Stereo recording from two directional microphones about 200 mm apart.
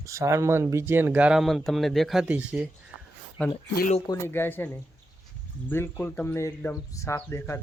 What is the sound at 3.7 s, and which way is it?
Speech, 40° left (ahead or behind).